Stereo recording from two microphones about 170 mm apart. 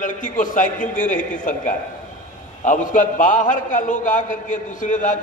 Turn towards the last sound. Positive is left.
turn(degrees=50)  # may be behind; listen again after turning